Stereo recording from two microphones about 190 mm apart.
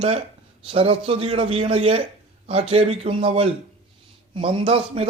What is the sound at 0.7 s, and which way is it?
A man's voice, 30° right (ahead or behind).